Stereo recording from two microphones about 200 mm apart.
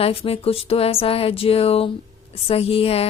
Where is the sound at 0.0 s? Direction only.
30° left (ahead or behind).